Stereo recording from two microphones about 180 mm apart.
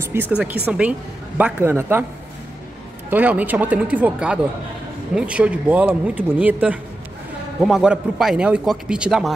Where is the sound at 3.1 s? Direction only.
10° right (ahead or behind).